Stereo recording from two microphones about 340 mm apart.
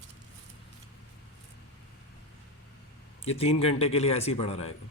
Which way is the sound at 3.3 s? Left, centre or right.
Centre.